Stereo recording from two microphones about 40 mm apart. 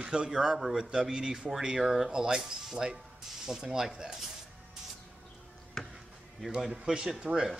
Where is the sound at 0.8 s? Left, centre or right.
Centre.